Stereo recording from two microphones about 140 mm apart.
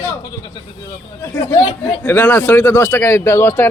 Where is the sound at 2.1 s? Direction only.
10° left (ahead or behind).